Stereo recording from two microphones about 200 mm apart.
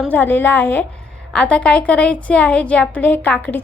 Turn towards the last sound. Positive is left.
turn(degrees=10)  # may be behind; listen again after turning